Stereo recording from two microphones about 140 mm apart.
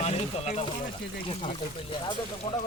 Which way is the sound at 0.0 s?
50° left (ahead or behind).